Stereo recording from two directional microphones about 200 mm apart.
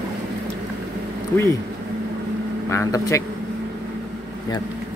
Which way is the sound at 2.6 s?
15° left (ahead or behind).